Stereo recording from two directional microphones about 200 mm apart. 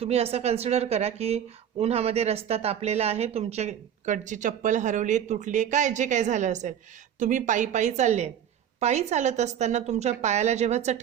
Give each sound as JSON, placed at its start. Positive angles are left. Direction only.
{"t": 0.0, "sound": "speech", "side_deg": -30}